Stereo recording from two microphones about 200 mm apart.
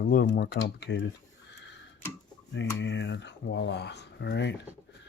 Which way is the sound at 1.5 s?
60° left (ahead or behind).